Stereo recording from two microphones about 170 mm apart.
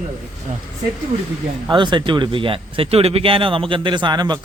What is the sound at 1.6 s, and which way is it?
Speech, 25° right (ahead or behind).